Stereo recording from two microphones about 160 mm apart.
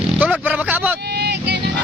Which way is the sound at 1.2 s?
90° right.